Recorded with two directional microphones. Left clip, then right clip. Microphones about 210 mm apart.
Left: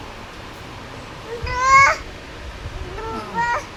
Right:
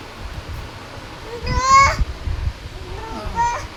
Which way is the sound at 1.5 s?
10° left (ahead or behind).